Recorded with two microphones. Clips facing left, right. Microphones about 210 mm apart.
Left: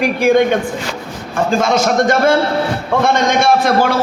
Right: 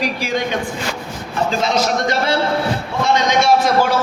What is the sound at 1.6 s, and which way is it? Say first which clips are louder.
A man's voice: left 5 dB; 50° left (ahead or behind).